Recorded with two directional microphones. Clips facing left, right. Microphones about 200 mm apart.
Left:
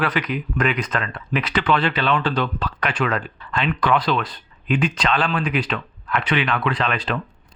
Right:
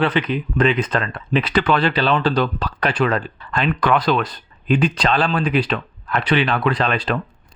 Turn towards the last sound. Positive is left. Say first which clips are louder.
# right 3 dB
turn(degrees=-35)  # may be behind; listen again after turning